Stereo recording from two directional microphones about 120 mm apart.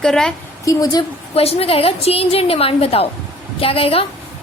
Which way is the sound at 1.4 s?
55° left (ahead or behind).